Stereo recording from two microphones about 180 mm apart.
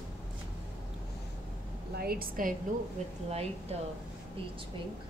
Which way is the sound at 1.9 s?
55° right (ahead or behind).